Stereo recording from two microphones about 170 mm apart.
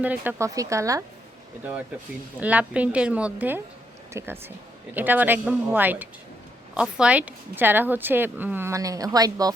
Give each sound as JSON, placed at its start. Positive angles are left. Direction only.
{"t": 0.0, "sound": "a woman's voice", "side_deg": -10}
{"t": 2.4, "sound": "a woman's voice", "side_deg": -10}